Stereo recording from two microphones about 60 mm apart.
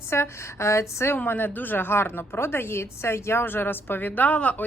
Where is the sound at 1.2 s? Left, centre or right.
Left.